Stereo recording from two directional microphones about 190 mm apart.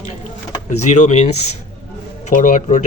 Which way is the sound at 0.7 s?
40° left (ahead or behind).